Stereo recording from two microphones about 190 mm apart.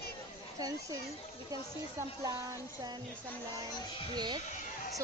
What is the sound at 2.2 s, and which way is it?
Speech, 15° right (ahead or behind).